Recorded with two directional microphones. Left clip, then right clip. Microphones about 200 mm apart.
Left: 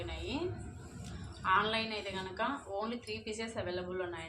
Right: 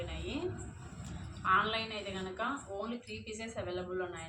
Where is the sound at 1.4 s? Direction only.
35° left (ahead or behind).